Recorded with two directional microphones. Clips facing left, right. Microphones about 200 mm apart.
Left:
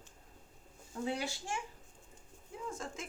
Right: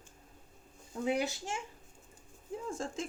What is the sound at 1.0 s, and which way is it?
Speech, 20° right (ahead or behind).